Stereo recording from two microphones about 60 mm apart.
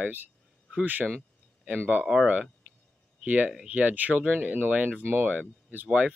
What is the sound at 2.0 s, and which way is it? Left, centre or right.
Speech, centre.